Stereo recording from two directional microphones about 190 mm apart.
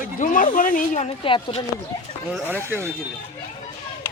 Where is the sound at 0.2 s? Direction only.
45° left (ahead or behind); by 1.6 s 30° left (ahead or behind).